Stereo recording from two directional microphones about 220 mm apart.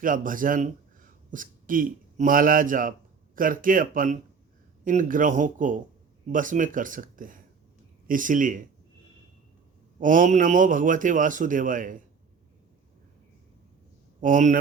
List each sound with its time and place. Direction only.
0.0 s a man's voice: 40° right (ahead or behind)
10.0 s a man's voice: 35° right (ahead or behind)
14.2 s a man's voice: 35° right (ahead or behind)